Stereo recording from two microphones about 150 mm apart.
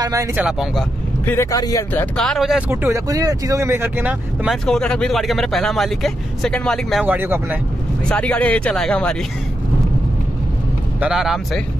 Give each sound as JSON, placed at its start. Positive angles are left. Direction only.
{"t": 0.0, "sound": "speech", "side_deg": -20}
{"t": 0.4, "sound": "speech", "side_deg": -5}
{"t": 1.2, "sound": "speech", "side_deg": 15}
{"t": 2.0, "sound": "speech", "side_deg": 5}
{"t": 2.7, "sound": "speech", "side_deg": -20}
{"t": 4.6, "sound": "speech", "side_deg": 5}
{"t": 7.1, "sound": "speech", "side_deg": -15}
{"t": 8.1, "sound": "speech", "side_deg": 10}
{"t": 11.0, "sound": "speech", "side_deg": -5}